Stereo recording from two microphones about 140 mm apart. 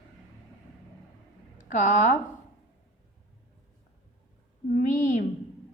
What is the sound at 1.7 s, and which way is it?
Speech, 60° left (ahead or behind).